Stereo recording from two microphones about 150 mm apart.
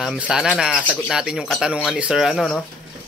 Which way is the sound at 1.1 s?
5° right (ahead or behind).